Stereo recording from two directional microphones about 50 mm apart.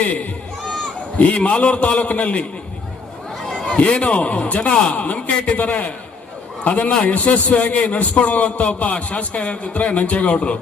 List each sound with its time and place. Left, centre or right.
0.0 s a man's voice: left
3.4 s a sound: centre
3.8 s a man's voice: left